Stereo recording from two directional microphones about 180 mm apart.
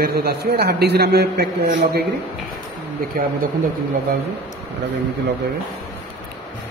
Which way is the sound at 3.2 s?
55° right (ahead or behind).